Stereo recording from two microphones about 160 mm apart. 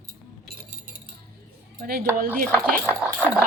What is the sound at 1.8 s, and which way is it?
Speech, 65° right (ahead or behind).